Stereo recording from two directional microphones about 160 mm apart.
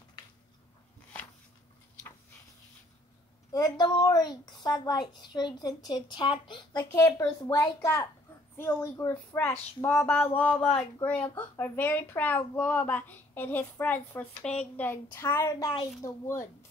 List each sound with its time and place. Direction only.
3.5 s a child's voice: 25° left (ahead or behind); by 10.6 s 10° left (ahead or behind)
10.6 s child singing: 5° left (ahead or behind)
11.0 s a child's voice: 10° left (ahead or behind)